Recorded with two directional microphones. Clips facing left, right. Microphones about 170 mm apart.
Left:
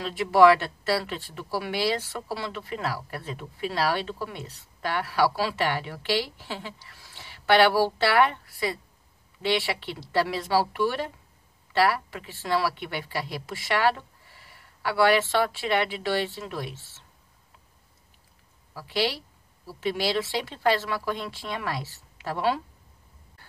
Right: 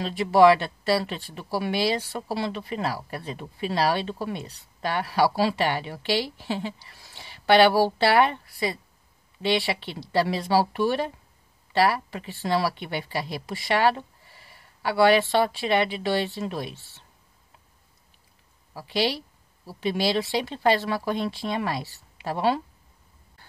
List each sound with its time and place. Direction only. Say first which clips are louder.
0.0 s speech: right 1 dB; 20° right (ahead or behind)
13.6 s speech: right 2 dB; 30° right (ahead or behind)
18.7 s a woman's voice: right 2 dB; 25° right (ahead or behind)